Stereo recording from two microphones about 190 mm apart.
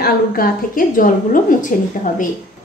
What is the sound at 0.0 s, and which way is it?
A woman's voice, 50° left (ahead or behind).